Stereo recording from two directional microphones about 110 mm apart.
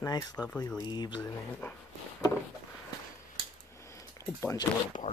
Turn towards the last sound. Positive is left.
turn(degrees=25)  # may be behind; listen again after turning